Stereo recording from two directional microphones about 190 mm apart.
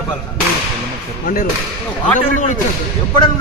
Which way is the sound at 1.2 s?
50° left (ahead or behind).